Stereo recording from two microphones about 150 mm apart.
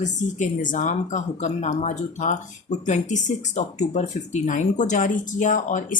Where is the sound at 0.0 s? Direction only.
55° left (ahead or behind).